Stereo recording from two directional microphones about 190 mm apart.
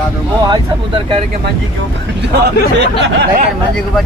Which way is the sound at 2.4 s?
65° right (ahead or behind).